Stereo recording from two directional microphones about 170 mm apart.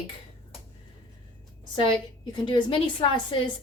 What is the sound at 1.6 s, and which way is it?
A woman's voice, 30° left (ahead or behind).